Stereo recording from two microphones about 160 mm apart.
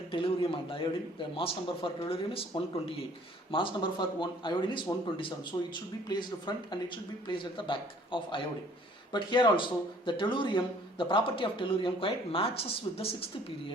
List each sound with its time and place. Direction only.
0.1 s speech: 35° left (ahead or behind)